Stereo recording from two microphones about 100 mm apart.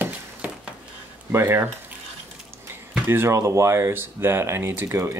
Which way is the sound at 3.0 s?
25° right (ahead or behind).